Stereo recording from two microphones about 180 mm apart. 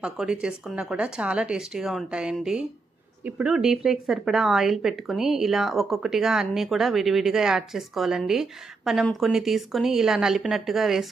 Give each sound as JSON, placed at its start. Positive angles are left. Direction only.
{"t": 0.0, "sound": "speech", "side_deg": -5}